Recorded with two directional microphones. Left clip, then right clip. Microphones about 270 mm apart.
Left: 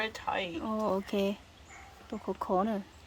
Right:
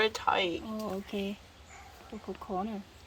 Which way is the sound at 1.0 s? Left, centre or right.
Centre.